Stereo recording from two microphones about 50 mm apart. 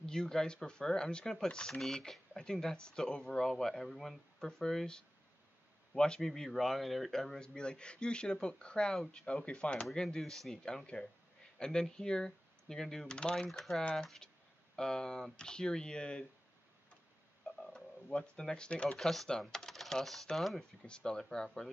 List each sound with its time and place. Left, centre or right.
0.0 s speech: centre
9.3 s speech: left
10.0 s speech: centre
13.5 s speech: centre
17.6 s a sound: centre
18.9 s speech: centre
20.8 s speech: centre